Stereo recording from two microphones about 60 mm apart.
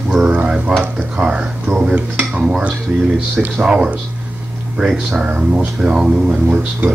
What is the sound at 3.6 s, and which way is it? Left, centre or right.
Speech, centre.